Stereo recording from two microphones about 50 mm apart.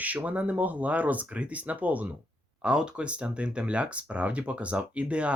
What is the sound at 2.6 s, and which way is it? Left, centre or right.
Speech, centre.